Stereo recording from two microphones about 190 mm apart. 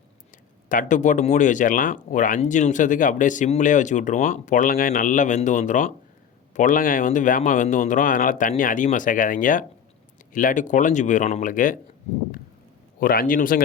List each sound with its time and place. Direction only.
0.7 s speech: 45° left (ahead or behind)
13.0 s speech: 50° left (ahead or behind)